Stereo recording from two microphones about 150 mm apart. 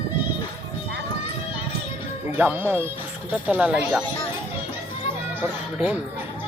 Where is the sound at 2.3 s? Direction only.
10° right (ahead or behind).